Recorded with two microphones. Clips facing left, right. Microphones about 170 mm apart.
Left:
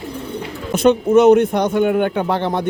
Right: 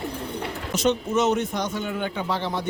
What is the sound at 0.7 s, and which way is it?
Speech, 55° left (ahead or behind).